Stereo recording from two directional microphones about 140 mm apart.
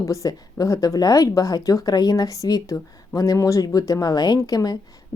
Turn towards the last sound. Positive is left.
turn(degrees=25)  # may be behind; listen again after turning